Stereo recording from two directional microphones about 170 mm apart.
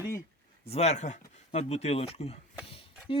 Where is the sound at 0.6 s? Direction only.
40° left (ahead or behind).